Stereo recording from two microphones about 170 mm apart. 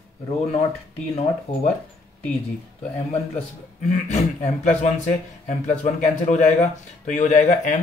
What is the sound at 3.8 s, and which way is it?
A man's voice, 45° left (ahead or behind).